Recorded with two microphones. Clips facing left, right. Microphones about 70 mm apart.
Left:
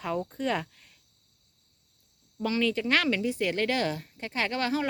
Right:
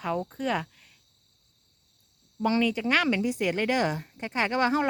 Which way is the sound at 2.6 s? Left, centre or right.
Centre.